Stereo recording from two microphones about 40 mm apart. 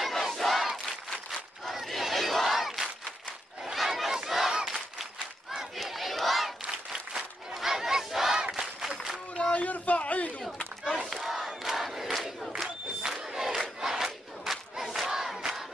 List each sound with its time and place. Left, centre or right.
0.0 s battle cry: centre
4.5 s crowd: centre
5.8 s battle cry: centre
6.6 s applause: right
7.5 s battle cry: centre
8.4 s battle cry: right
9.3 s a sound: left
11.0 s crowd: centre